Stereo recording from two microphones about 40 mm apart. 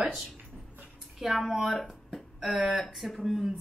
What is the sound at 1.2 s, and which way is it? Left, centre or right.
Speech, centre.